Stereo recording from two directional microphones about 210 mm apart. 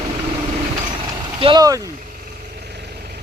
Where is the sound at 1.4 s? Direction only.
20° right (ahead or behind).